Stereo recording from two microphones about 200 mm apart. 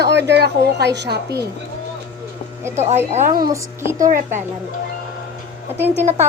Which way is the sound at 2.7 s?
35° right (ahead or behind).